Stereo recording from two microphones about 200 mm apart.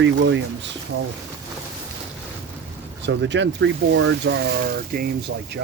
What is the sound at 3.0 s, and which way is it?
Speech, 65° right (ahead or behind).